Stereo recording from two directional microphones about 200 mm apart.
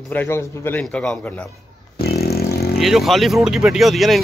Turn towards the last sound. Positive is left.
turn(degrees=0)  # may be behind; listen again after turning